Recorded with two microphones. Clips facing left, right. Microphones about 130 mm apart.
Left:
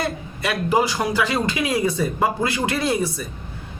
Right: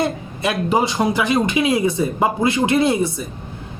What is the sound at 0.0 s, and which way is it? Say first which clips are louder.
Speech: right 4 dB; 25° right (ahead or behind).